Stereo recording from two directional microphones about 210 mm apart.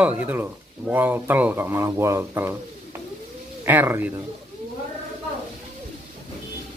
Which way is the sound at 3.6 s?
10° right (ahead or behind).